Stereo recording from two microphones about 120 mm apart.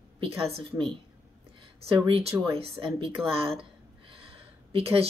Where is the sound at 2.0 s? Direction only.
50° right (ahead or behind).